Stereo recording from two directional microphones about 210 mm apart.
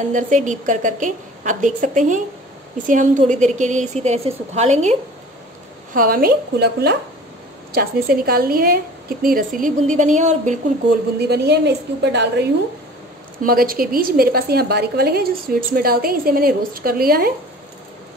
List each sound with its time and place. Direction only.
0.1 s a woman's voice: 35° right (ahead or behind)
5.9 s a woman's voice: 45° right (ahead or behind)
11.2 s a woman's voice: 50° right (ahead or behind)
13.4 s a woman's voice: 45° right (ahead or behind)